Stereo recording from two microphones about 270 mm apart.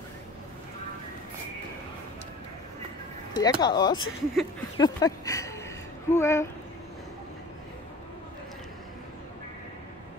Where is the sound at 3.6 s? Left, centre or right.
Centre.